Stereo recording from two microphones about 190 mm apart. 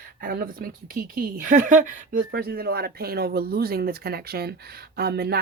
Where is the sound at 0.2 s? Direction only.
50° right (ahead or behind).